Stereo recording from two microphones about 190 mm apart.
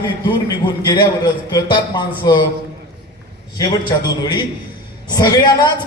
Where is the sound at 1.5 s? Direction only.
20° left (ahead or behind).